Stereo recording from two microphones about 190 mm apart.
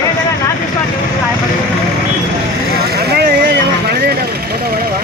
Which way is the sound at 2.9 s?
55° right (ahead or behind).